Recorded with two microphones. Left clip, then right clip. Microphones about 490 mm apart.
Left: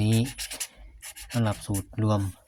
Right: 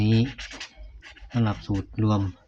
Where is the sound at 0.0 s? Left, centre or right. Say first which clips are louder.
Right 3 dB; left.